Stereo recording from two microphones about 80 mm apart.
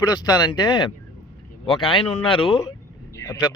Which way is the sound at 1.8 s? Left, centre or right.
Left.